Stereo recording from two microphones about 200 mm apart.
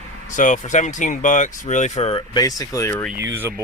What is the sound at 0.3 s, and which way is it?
Speech, 40° left (ahead or behind).